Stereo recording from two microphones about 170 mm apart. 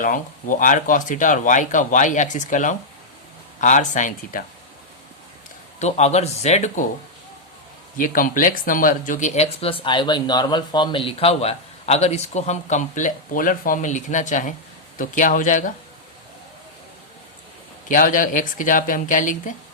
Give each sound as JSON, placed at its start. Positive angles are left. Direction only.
{"t": 0.0, "sound": "speech", "side_deg": 50}
{"t": 5.8, "sound": "speech", "side_deg": 40}
{"t": 7.9, "sound": "speech", "side_deg": 55}
{"t": 17.8, "sound": "speech", "side_deg": 50}